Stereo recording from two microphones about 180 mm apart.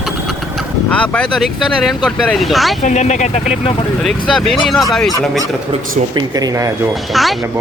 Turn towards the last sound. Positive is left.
turn(degrees=0)  # may be behind; listen again after turning